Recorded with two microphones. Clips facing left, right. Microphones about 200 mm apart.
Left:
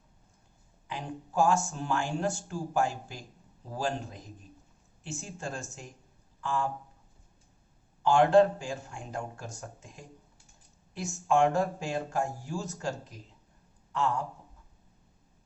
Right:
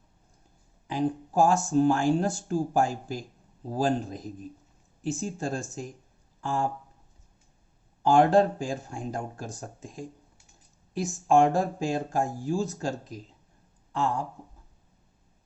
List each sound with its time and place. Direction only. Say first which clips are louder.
0.9 s speech: right 11 dB; 35° right (ahead or behind)
8.0 s speech: right 1 dB; 35° right (ahead or behind)